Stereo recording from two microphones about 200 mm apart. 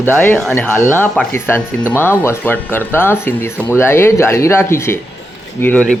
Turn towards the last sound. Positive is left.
turn(degrees=5)  # may be behind; listen again after turning